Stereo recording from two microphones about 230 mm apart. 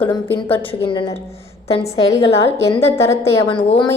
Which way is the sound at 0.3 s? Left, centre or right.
Left.